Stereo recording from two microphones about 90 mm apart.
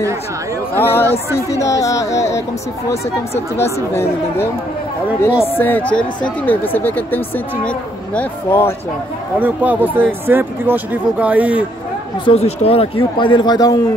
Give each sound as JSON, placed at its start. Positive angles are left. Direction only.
{"t": 0.7, "sound": "speech", "side_deg": 25}
{"t": 1.5, "sound": "speech", "side_deg": 35}
{"t": 3.9, "sound": "speech", "side_deg": 25}
{"t": 5.5, "sound": "speech", "side_deg": 20}
{"t": 8.5, "sound": "speech", "side_deg": 30}
{"t": 9.4, "sound": "speech", "side_deg": -20}
{"t": 12.3, "sound": "a man's voice", "side_deg": 85}